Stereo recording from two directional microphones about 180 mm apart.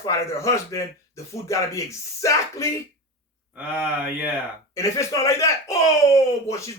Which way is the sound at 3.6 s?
10° right (ahead or behind).